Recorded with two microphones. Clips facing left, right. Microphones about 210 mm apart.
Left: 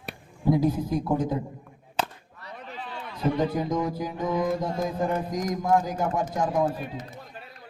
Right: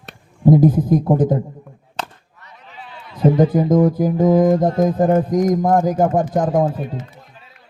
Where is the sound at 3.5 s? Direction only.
50° right (ahead or behind).